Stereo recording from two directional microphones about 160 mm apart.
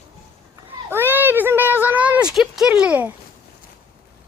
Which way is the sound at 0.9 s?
15° right (ahead or behind).